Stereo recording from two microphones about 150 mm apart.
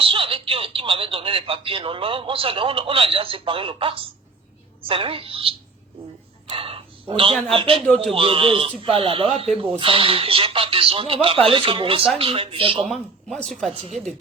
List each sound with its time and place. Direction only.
0.0 s speech: 35° right (ahead or behind)
12.9 s speech: centre (ahead or behind)